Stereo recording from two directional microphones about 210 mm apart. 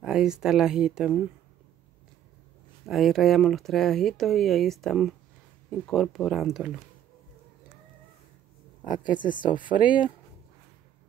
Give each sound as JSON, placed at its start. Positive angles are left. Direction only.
{"t": 0.0, "sound": "speech", "side_deg": -5}
{"t": 2.9, "sound": "speech", "side_deg": 0}
{"t": 8.8, "sound": "speech", "side_deg": 40}